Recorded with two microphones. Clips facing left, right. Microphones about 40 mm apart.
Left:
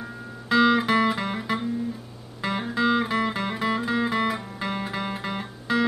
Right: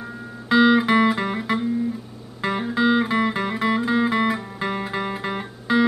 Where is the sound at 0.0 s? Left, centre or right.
Centre.